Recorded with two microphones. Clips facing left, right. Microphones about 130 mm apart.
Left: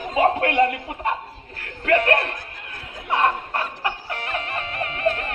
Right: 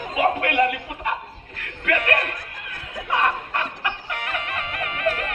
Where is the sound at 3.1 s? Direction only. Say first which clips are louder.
Left 2 dB; 35° left (ahead or behind).